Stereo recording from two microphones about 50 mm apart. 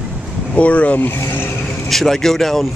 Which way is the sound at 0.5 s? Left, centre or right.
Left.